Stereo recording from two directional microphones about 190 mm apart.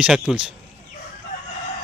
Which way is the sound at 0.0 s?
5° right (ahead or behind).